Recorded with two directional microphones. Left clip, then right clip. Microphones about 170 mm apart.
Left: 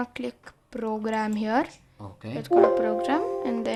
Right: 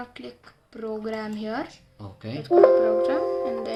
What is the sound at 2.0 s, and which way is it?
Speech, centre (ahead or behind).